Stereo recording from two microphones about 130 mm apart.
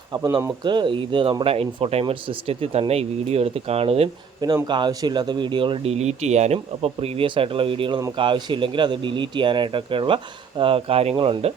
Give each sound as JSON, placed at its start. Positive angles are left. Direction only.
{"t": 0.1, "sound": "speech", "side_deg": -25}
{"t": 1.5, "sound": "speech", "side_deg": -50}
{"t": 4.4, "sound": "speech", "side_deg": -30}